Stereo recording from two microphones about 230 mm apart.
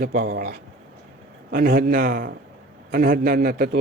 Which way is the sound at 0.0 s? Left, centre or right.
Right.